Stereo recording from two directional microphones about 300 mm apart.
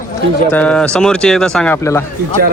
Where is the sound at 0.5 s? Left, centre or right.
Centre.